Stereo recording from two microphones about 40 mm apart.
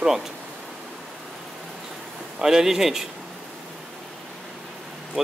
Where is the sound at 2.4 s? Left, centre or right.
Centre.